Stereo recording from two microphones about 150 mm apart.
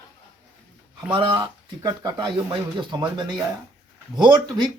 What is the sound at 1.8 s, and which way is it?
A man's voice, 25° right (ahead or behind).